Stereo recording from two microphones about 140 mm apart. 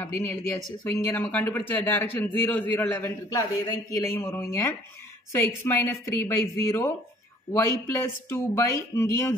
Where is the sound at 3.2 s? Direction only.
30° left (ahead or behind).